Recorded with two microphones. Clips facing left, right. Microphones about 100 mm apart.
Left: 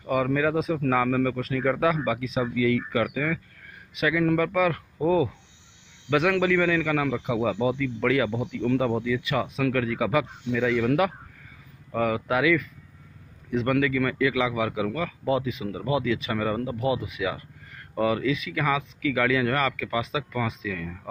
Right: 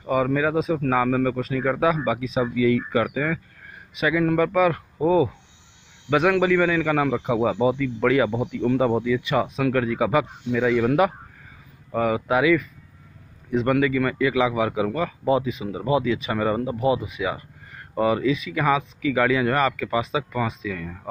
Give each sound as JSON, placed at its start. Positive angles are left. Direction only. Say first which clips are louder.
{"t": 0.0, "sound": "a man's voice", "louder": "right 2 dB", "side_deg": -20}